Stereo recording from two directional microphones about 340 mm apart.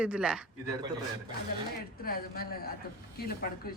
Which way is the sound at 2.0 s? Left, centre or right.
Left.